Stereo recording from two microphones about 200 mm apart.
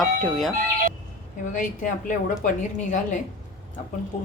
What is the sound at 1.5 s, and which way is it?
A woman's voice, 40° left (ahead or behind).